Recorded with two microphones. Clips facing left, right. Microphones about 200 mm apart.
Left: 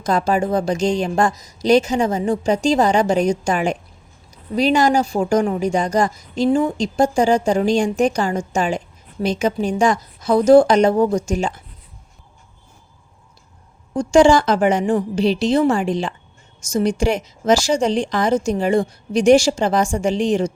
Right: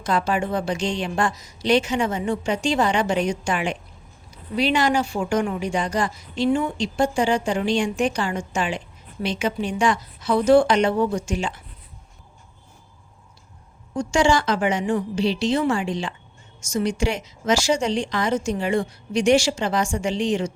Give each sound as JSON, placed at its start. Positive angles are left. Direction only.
{"t": 0.0, "sound": "speech", "side_deg": 40}
{"t": 13.9, "sound": "speech", "side_deg": 35}